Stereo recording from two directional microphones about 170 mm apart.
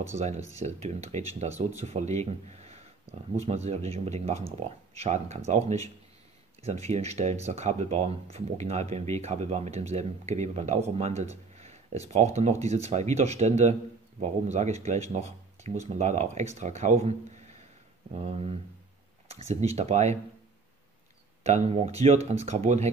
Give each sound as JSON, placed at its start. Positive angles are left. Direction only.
{"t": 0.2, "sound": "speech", "side_deg": -40}
{"t": 18.1, "sound": "speech", "side_deg": -35}
{"t": 21.4, "sound": "speech", "side_deg": -40}